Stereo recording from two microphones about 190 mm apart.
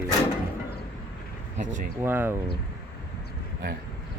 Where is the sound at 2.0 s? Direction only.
10° right (ahead or behind).